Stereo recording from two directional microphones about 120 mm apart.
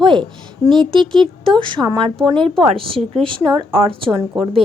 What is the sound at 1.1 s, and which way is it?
A woman's voice, 45° right (ahead or behind).